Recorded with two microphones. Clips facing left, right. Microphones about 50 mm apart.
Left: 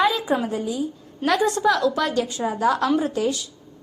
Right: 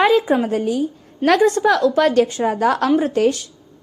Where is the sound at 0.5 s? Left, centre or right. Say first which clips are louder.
Right 6 dB; right.